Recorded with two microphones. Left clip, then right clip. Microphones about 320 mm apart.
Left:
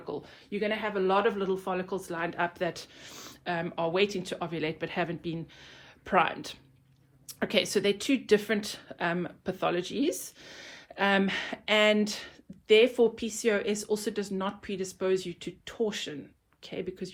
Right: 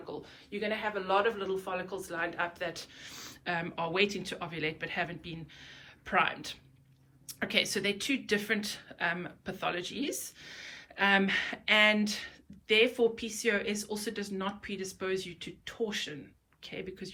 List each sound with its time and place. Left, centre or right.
0.0 s speech: left; by 17.1 s centre